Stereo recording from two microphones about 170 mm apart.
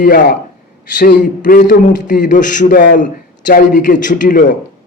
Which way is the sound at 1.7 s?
50° left (ahead or behind).